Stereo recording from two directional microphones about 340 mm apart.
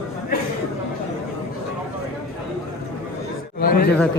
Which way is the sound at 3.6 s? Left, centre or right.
Left.